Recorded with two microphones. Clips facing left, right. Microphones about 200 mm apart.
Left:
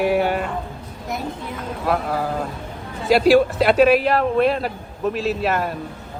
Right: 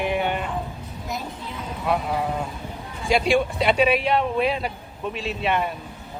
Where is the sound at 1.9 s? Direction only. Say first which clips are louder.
Left 2 dB; centre (ahead or behind).